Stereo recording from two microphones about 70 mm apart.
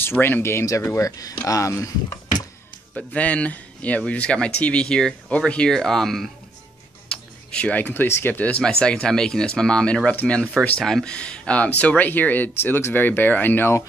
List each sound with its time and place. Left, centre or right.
0.0 s speech: left
1.0 s speech: left
3.1 s speech: left; by 6.3 s centre
7.1 s speech: centre
8.6 s speech: centre
10.8 s speech: centre
11.1 s speech: centre